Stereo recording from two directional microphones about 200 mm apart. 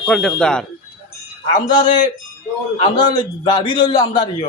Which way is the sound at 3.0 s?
20° left (ahead or behind).